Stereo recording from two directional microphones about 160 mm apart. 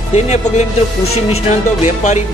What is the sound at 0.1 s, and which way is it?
Speech, 45° left (ahead or behind).